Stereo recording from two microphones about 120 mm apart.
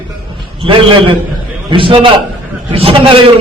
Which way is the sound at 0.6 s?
45° right (ahead or behind).